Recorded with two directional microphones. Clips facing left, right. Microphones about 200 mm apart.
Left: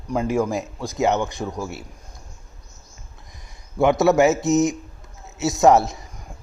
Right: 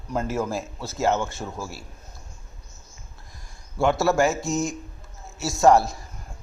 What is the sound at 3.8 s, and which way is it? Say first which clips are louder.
Speech: left 5 dB; 20° left (ahead or behind).